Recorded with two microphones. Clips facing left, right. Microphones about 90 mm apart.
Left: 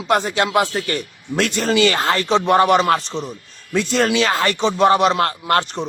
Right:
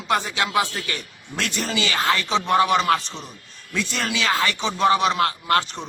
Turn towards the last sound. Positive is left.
turn(degrees=45)  # may be behind; listen again after turning